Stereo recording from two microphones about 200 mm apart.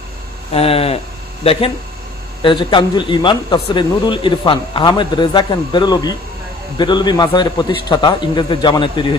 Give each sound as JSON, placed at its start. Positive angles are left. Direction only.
{"t": 0.5, "sound": "speech", "side_deg": 30}